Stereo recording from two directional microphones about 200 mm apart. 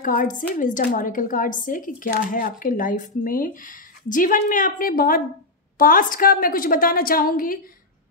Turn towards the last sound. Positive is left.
turn(degrees=45)  # may be behind; listen again after turning